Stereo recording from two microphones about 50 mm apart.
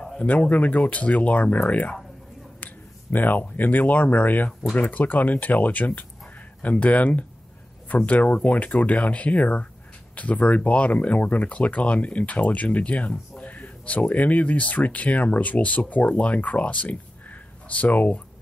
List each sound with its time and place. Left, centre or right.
0.2 s speech: left